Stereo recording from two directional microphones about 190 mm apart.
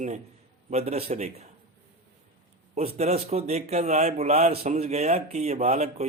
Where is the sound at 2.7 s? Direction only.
35° right (ahead or behind).